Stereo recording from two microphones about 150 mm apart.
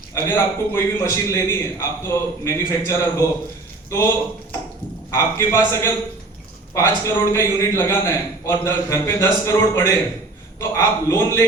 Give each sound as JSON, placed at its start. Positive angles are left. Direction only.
{"t": 0.1, "sound": "a man's voice", "side_deg": 15}
{"t": 5.1, "sound": "a man's voice", "side_deg": 20}